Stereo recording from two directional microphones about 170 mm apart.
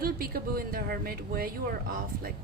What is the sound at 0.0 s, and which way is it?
Speech, 60° right (ahead or behind).